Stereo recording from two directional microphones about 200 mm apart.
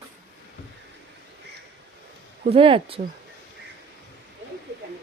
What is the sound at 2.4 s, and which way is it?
Speech, 30° right (ahead or behind).